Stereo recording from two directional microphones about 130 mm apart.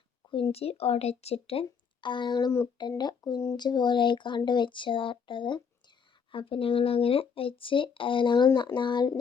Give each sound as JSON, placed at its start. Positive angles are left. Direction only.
{"t": 0.3, "sound": "speech", "side_deg": 40}
{"t": 1.6, "sound": "speech", "side_deg": 35}